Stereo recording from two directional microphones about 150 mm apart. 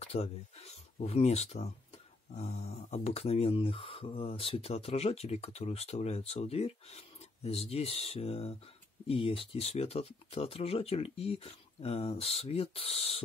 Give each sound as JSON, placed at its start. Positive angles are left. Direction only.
{"t": 0.0, "sound": "speech", "side_deg": 40}